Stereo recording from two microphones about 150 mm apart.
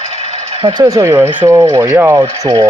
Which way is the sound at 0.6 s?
25° right (ahead or behind).